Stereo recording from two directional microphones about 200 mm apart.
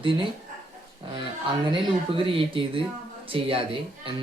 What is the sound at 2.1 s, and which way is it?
Speech, 25° right (ahead or behind).